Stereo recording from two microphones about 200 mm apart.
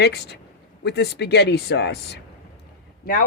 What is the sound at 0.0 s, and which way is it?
Speech, 55° left (ahead or behind).